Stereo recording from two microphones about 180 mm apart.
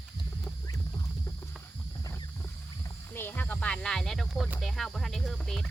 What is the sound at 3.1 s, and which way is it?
Speech, 10° left (ahead or behind).